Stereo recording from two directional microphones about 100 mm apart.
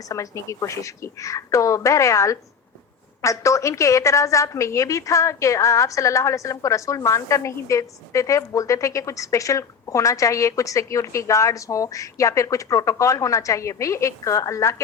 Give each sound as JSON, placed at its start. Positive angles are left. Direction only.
{"t": 0.1, "sound": "a woman's voice", "side_deg": 30}